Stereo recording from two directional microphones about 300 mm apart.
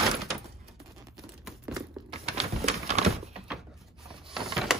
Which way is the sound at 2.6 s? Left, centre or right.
Right.